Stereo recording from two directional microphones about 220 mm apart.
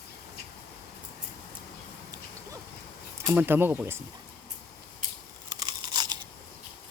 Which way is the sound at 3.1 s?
10° right (ahead or behind).